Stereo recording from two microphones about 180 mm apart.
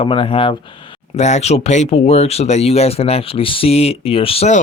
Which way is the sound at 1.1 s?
40° left (ahead or behind).